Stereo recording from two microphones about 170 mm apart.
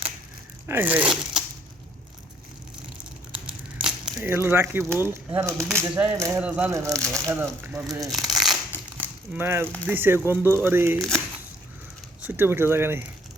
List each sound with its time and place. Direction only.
0.7 s speech: 10° right (ahead or behind)
3.0 s tearing: 5° right (ahead or behind)
4.2 s speech: 15° right (ahead or behind)
8.1 s crumpling: centre (ahead or behind)
9.0 s a sound: 10° right (ahead or behind)
9.8 s speech: 10° right (ahead or behind)
10.9 s speech: centre (ahead or behind)
12.2 s speech: 10° right (ahead or behind)